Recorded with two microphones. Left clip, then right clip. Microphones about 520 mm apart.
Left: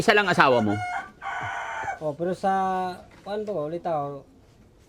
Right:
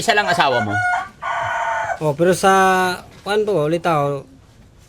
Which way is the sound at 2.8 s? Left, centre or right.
Right.